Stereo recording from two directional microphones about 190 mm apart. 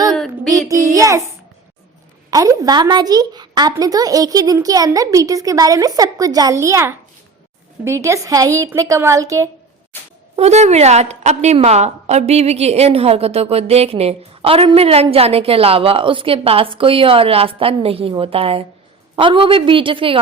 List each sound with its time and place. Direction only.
0.1 s child singing: centre (ahead or behind)
0.7 s a woman's voice: 15° right (ahead or behind)
2.3 s a woman's voice: 20° right (ahead or behind)
9.9 s a sound: 10° left (ahead or behind)
10.3 s a woman's voice: 35° right (ahead or behind)